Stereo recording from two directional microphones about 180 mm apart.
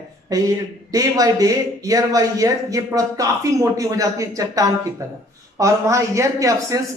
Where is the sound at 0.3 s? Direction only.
20° right (ahead or behind).